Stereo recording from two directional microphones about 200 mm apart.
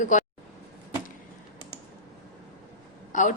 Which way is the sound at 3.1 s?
40° left (ahead or behind).